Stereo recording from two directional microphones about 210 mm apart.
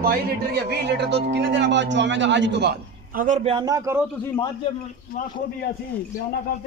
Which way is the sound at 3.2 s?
35° right (ahead or behind).